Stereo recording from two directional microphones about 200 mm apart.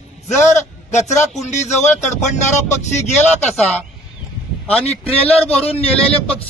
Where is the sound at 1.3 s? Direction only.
35° left (ahead or behind).